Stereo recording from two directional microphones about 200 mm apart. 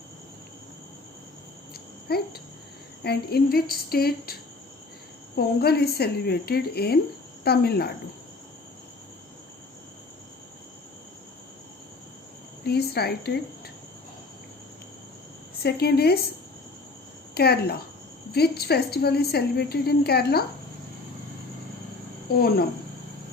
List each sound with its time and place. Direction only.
1.7 s a sound: 50° left (ahead or behind)
3.0 s a woman's voice: 55° left (ahead or behind)
5.4 s a woman's voice: 50° left (ahead or behind)
12.6 s a woman's voice: 50° left (ahead or behind)
15.6 s a woman's voice: 50° left (ahead or behind)
17.3 s a woman's voice: 50° left (ahead or behind)
22.3 s a woman's voice: 50° left (ahead or behind)